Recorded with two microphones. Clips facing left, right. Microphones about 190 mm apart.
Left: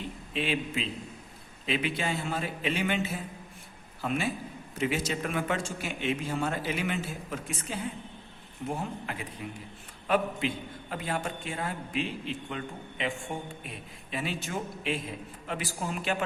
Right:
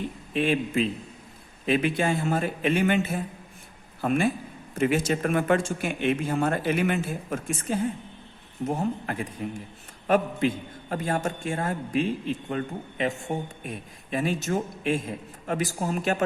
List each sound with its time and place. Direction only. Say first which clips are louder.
0.3 s speech: right 7 dB; 50° right (ahead or behind)